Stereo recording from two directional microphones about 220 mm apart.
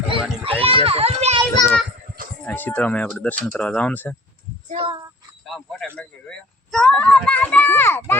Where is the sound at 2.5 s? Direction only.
5° left (ahead or behind).